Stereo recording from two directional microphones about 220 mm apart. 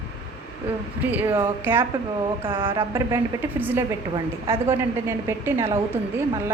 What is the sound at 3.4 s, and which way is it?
A woman's voice, 10° right (ahead or behind).